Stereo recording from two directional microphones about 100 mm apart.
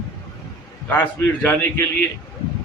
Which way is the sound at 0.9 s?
20° left (ahead or behind).